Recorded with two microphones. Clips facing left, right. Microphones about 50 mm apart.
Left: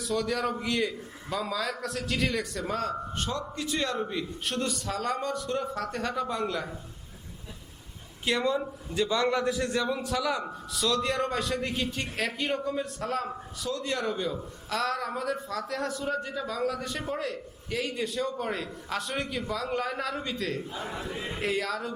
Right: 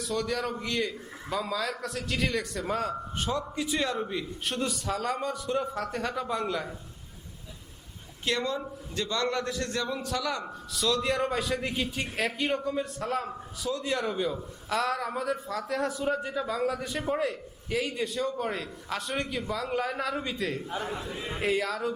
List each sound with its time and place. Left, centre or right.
0.0 s a man's voice: centre
8.2 s a man's voice: centre
20.9 s speech: left
21.3 s a man's voice: centre